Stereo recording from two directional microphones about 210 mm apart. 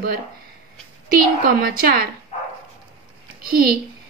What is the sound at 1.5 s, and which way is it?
Speech, 45° right (ahead or behind).